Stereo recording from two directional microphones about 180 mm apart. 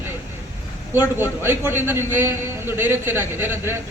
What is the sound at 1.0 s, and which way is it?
A man's voice, 10° right (ahead or behind).